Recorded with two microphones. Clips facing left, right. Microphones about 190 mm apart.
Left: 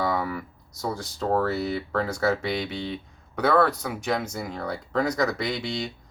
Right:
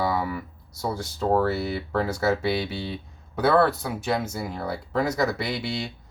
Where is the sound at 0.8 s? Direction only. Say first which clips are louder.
Right 2 dB; 10° right (ahead or behind).